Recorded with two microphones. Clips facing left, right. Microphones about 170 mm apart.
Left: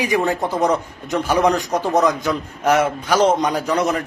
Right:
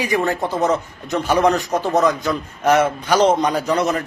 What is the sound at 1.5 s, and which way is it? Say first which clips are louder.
Speech: even; 15° left (ahead or behind).